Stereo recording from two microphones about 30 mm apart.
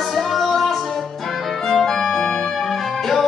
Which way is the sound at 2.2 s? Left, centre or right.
Left.